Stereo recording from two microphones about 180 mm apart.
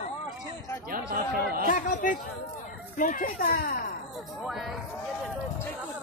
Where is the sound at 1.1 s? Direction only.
55° right (ahead or behind).